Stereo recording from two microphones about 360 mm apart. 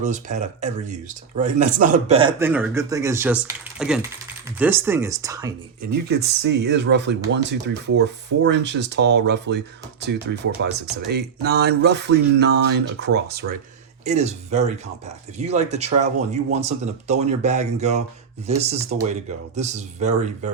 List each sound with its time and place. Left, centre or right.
0.0 s speech: centre
5.8 s speech: right